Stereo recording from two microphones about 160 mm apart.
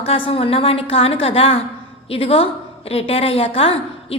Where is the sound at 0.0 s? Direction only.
35° left (ahead or behind).